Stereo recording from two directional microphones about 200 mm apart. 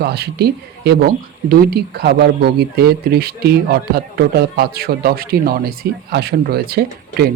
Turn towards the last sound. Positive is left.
turn(degrees=-50)  # may be behind; listen again after turning